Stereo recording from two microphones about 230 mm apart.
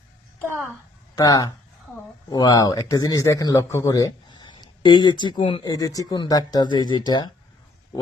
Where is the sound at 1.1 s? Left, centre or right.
Centre.